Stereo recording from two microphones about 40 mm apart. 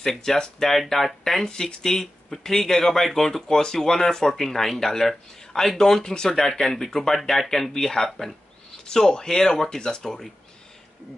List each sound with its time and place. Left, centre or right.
0.0 s speech: centre